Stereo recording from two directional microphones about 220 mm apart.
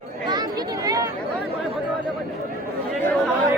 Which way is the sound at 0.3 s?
20° right (ahead or behind).